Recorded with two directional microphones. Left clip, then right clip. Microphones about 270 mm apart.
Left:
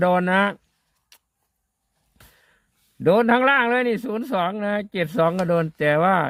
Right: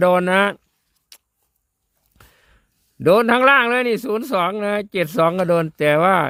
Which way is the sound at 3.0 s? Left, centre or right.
Right.